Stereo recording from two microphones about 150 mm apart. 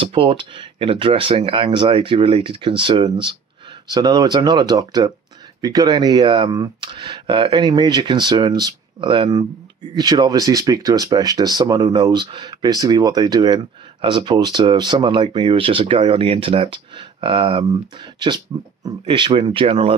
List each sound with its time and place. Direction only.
0.0 s speech: 35° right (ahead or behind)